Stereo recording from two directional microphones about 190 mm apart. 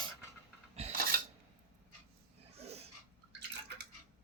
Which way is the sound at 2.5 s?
35° right (ahead or behind).